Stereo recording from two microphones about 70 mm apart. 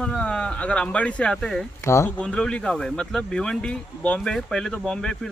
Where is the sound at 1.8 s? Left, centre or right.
Left.